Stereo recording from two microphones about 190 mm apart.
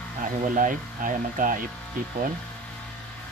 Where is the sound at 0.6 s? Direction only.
45° right (ahead or behind).